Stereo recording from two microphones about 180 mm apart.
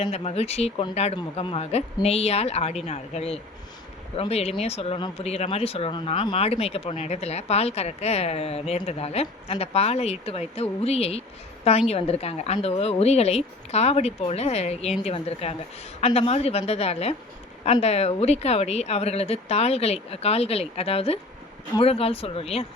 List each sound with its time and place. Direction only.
0.0 s speech: 35° left (ahead or behind)